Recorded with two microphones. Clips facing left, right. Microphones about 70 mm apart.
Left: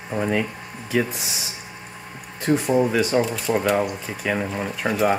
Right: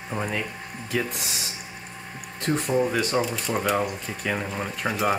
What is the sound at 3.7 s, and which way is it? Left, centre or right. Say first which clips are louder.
Speech: left 3 dB; left.